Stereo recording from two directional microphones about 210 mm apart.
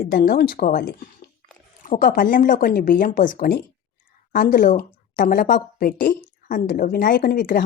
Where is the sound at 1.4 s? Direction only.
40° right (ahead or behind).